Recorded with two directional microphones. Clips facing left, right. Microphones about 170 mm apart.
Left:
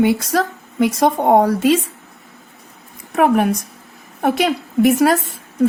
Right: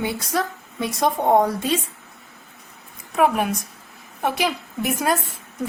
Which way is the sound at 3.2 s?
50° left (ahead or behind).